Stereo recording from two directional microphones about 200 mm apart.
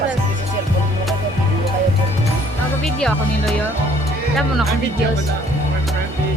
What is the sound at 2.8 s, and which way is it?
Speech, centre (ahead or behind).